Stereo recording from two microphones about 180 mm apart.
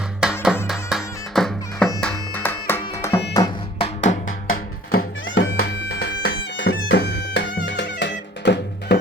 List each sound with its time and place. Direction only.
0.2 s music: 5° right (ahead or behind); by 3.2 s 15° left (ahead or behind)
3.8 s music: 40° left (ahead or behind)
4.5 s music: 55° left (ahead or behind)
5.4 s music: 90° left; by 9.0 s 70° left (ahead or behind)